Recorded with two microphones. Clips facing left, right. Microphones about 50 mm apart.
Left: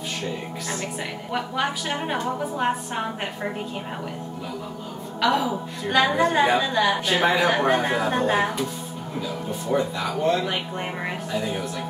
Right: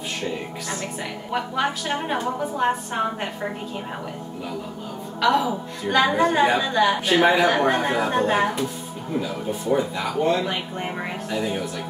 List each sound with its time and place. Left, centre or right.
1.3 s a woman's voice: centre
5.2 s a woman's voice: centre
9.7 s a woman's voice: centre
10.5 s a woman's voice: centre
11.3 s a woman's voice: centre